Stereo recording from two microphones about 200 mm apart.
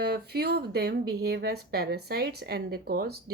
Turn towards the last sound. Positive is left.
turn(degrees=-50)  # may be behind; listen again after turning